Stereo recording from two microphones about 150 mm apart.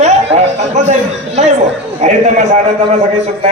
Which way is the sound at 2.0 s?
55° right (ahead or behind).